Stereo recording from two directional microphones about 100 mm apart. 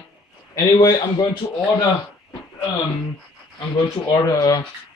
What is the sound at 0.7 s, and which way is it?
Speech, 40° left (ahead or behind).